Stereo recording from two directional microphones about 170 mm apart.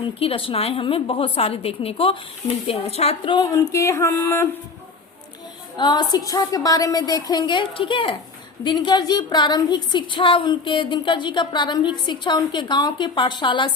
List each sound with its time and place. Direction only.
0.2 s a woman's voice: 35° left (ahead or behind); by 4.4 s 15° left (ahead or behind)
5.7 s speech: 25° left (ahead or behind)